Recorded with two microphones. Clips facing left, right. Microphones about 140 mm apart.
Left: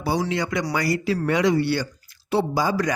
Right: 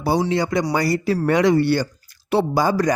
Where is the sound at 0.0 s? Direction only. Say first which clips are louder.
Right 4 dB; 35° right (ahead or behind); by 2.7 s 55° right (ahead or behind).